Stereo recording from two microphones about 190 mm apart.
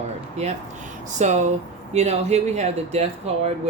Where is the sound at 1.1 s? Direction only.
40° right (ahead or behind).